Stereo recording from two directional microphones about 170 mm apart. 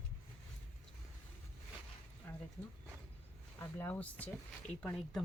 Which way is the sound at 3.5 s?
10° left (ahead or behind).